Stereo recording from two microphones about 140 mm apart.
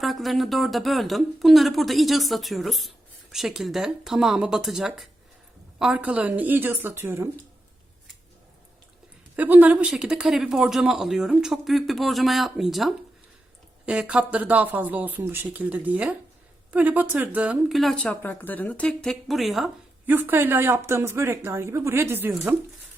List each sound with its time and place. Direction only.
0.0 s speech: centre (ahead or behind); by 7.3 s 15° right (ahead or behind)
9.3 s speech: 10° right (ahead or behind)
20.1 s speech: 15° right (ahead or behind)